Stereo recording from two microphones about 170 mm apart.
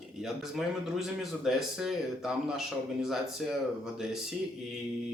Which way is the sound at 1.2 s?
Centre (ahead or behind).